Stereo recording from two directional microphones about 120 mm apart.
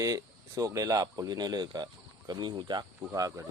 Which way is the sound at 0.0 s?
30° right (ahead or behind).